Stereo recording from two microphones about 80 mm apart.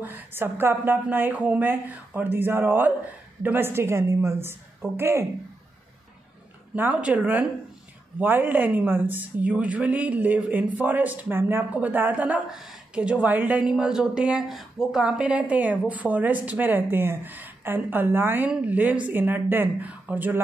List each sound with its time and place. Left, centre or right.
0.0 s a woman's voice: right
6.7 s a woman's voice: centre
12.4 s a woman's voice: centre; by 13.6 s right
13.6 s a woman's voice: centre